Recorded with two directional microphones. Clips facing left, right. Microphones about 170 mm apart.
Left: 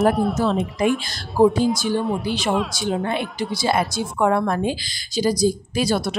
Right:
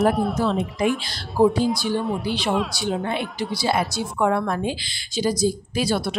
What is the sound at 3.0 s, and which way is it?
A woman's voice, 45° left (ahead or behind).